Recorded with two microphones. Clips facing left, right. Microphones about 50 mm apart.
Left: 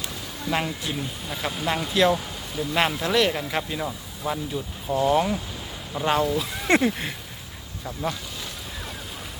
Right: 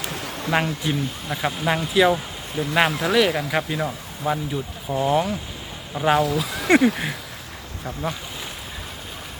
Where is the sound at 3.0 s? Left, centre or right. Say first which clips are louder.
Right 3 dB; centre.